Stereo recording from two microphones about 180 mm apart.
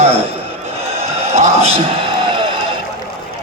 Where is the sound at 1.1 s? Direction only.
35° right (ahead or behind).